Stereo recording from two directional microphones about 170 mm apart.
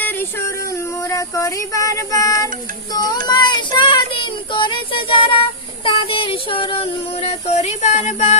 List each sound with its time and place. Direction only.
0.0 s music: 10° left (ahead or behind)
1.1 s speech: 20° left (ahead or behind)
3.2 s child singing: 25° left (ahead or behind)
5.8 s a sound: 35° left (ahead or behind)